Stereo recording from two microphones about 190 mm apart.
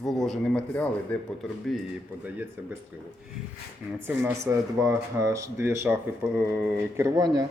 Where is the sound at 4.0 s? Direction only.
10° right (ahead or behind).